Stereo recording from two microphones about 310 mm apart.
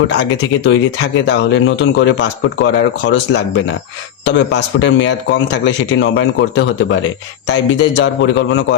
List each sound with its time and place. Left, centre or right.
0.1 s speech: left